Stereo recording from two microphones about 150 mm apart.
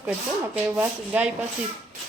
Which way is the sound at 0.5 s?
10° right (ahead or behind).